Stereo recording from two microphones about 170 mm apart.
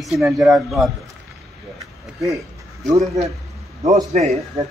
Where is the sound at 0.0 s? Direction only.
Centre (ahead or behind).